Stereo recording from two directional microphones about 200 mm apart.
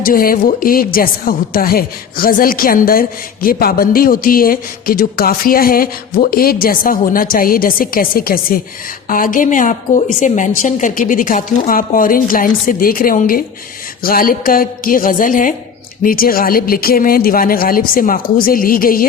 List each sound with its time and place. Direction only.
0.0 s a man's voice: 45° left (ahead or behind)